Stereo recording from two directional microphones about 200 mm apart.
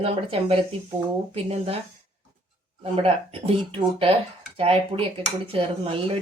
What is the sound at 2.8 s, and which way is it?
A woman's voice, 30° right (ahead or behind).